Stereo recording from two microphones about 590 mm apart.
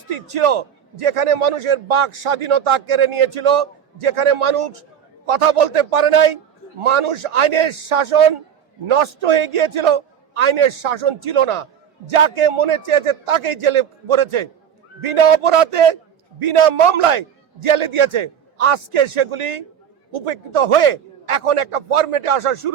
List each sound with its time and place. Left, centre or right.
0.1 s a man's voice: right
19.4 s a man's voice: right
20.1 s a man's voice: right